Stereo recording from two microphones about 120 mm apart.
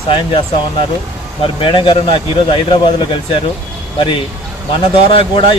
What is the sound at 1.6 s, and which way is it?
Speech, 45° left (ahead or behind).